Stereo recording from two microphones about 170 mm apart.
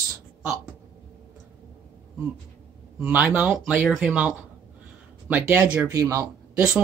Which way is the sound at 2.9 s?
10° right (ahead or behind).